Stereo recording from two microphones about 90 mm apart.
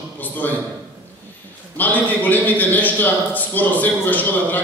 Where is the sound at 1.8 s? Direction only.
20° left (ahead or behind).